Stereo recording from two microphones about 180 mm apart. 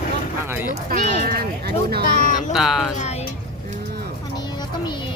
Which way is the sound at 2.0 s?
50° left (ahead or behind).